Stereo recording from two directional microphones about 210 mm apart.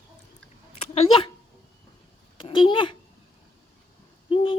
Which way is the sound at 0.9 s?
25° left (ahead or behind).